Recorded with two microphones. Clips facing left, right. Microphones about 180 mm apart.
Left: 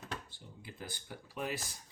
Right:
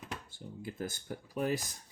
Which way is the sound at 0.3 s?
45° right (ahead or behind).